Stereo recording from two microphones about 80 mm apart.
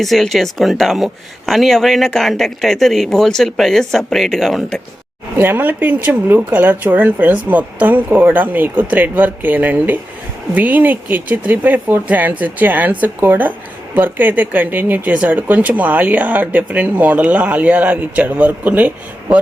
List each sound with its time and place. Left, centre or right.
0.0 s speech: centre
5.4 s speech: right